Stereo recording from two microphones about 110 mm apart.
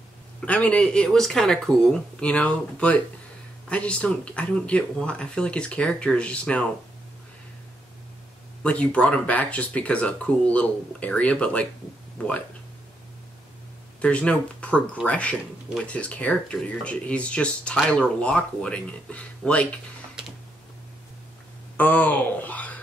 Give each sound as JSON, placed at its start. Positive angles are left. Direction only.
{"t": 0.4, "sound": "speech", "side_deg": 10}
{"t": 8.6, "sound": "speech", "side_deg": 10}
{"t": 14.0, "sound": "speech", "side_deg": 10}
{"t": 21.7, "sound": "speech", "side_deg": 15}